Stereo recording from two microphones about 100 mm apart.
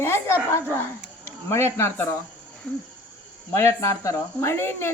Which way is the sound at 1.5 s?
25° left (ahead or behind).